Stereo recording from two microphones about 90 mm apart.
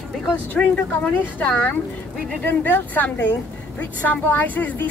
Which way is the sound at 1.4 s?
15° left (ahead or behind).